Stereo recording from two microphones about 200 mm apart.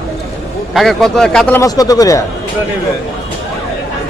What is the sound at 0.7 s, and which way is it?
Speech, centre (ahead or behind).